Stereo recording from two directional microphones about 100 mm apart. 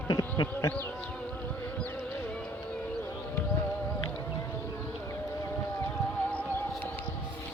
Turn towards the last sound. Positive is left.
turn(degrees=15)  # may be behind; listen again after turning